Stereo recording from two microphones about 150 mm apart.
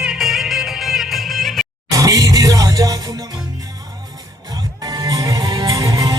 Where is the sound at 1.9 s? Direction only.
25° right (ahead or behind).